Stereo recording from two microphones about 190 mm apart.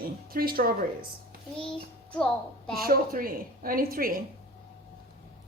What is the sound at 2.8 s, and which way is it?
A woman's voice, 50° right (ahead or behind).